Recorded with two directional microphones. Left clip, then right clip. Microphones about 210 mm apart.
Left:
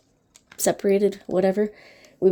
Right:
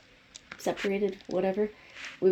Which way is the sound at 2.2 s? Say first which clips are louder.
Left 5 dB; 30° left (ahead or behind).